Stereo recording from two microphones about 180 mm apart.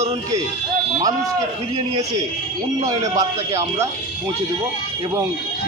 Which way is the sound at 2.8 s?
20° right (ahead or behind).